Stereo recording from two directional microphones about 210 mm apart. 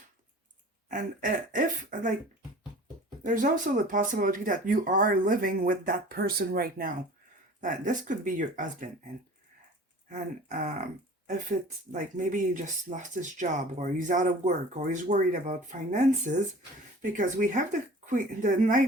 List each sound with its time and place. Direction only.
0.9 s speech: 40° right (ahead or behind)
3.2 s speech: 40° right (ahead or behind)
10.1 s speech: 40° right (ahead or behind)
11.9 s speech: 40° right (ahead or behind)